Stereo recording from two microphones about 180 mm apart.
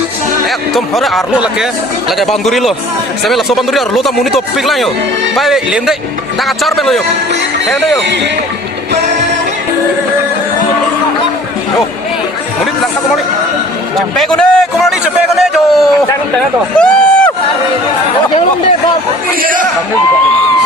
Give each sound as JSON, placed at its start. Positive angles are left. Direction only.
{"t": 0.7, "sound": "speech", "side_deg": 0}
{"t": 14.2, "sound": "a man's voice", "side_deg": 5}
{"t": 16.7, "sound": "a sound", "side_deg": 5}
{"t": 19.4, "sound": "a man's voice", "side_deg": -50}